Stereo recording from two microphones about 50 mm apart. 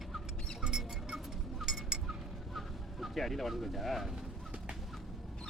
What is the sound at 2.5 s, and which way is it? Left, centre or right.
Speech, centre.